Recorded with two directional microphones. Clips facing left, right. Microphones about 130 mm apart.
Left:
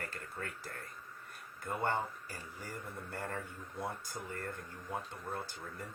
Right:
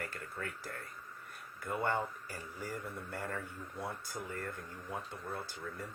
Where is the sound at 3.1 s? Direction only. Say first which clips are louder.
Even; 40° left (ahead or behind).